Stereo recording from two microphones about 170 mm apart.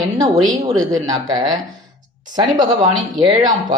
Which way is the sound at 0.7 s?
20° right (ahead or behind).